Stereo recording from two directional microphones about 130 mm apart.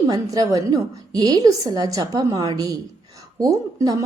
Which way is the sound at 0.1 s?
25° right (ahead or behind).